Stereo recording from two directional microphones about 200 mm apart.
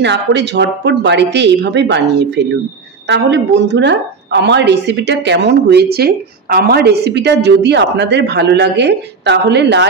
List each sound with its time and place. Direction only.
0.0 s a woman's voice: 60° right (ahead or behind)